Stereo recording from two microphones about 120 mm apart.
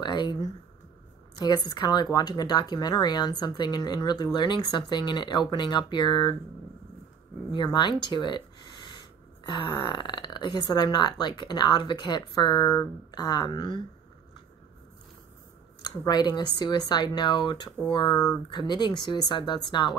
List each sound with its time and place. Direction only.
0.0 s a sound: 40° left (ahead or behind)
1.4 s speech: 35° left (ahead or behind)
7.5 s speech: 40° left (ahead or behind)
15.8 s speech: 30° left (ahead or behind)